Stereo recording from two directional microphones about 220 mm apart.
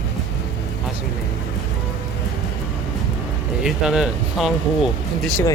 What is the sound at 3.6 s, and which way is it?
Speech, 5° right (ahead or behind).